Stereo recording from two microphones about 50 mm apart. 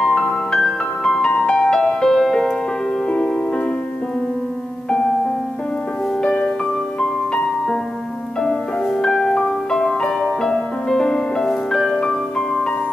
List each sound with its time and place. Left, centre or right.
0.0 s music: centre
6.2 s music: centre
9.0 s music: centre